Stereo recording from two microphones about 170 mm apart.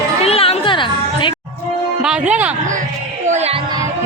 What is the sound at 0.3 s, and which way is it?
Chatter, 35° left (ahead or behind).